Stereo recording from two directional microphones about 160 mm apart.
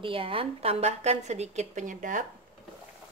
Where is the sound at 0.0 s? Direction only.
35° right (ahead or behind); by 2.2 s 55° right (ahead or behind).